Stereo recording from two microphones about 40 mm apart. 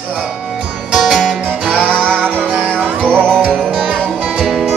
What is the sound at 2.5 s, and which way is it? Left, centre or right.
Music, right.